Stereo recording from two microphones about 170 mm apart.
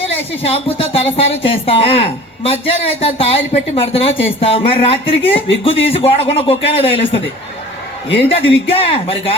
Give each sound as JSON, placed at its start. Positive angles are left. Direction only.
{"t": 0.0, "sound": "speech", "side_deg": 35}
{"t": 8.3, "sound": "speech", "side_deg": 35}